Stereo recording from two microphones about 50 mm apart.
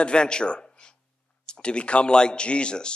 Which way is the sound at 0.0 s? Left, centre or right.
Centre.